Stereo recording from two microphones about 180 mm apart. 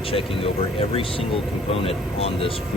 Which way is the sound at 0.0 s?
30° left (ahead or behind).